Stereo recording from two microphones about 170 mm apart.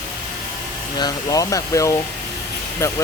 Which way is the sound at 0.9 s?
20° left (ahead or behind).